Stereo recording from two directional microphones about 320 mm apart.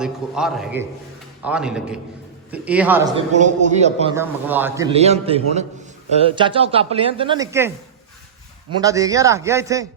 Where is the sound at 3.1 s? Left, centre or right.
Right.